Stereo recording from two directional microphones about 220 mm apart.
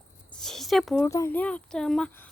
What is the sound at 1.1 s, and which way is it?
Speech, 10° left (ahead or behind).